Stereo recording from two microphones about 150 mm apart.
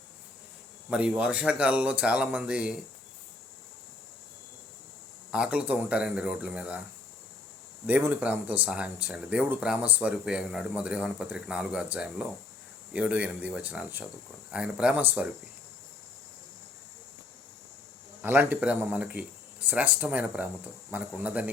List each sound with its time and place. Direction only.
0.9 s speech: 5° right (ahead or behind)
5.3 s speech: 5° right (ahead or behind)
7.9 s speech: 10° right (ahead or behind)
18.2 s speech: 10° right (ahead or behind)